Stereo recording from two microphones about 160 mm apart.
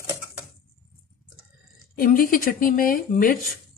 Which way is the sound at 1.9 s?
60° left (ahead or behind).